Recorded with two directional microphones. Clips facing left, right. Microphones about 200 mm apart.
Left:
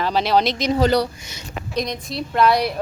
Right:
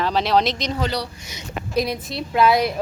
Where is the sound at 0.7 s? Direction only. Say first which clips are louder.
Left 7 dB; 45° left (ahead or behind).